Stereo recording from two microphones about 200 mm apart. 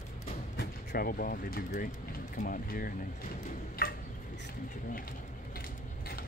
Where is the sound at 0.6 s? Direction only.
50° left (ahead or behind).